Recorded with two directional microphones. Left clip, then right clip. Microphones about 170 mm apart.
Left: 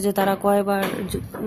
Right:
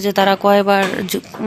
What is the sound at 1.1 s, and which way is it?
Speech, 30° right (ahead or behind).